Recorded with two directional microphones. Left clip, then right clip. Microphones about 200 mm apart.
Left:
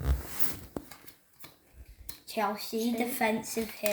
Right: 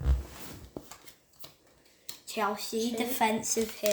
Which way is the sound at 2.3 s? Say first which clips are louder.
Even; 30° right (ahead or behind).